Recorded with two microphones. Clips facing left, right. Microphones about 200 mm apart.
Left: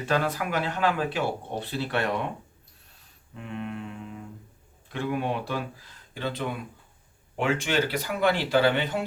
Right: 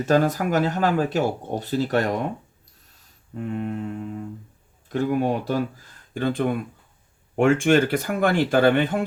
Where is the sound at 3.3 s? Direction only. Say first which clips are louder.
Right 7 dB; 45° right (ahead or behind).